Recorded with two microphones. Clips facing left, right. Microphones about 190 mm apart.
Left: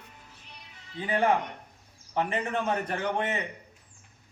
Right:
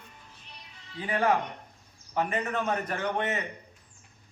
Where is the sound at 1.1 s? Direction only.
25° left (ahead or behind).